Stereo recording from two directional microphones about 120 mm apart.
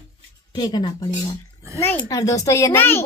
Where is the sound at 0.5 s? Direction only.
35° left (ahead or behind).